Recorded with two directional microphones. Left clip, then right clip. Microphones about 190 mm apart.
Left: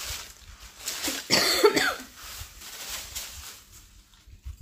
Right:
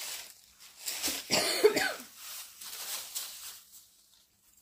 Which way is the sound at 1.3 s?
15° left (ahead or behind).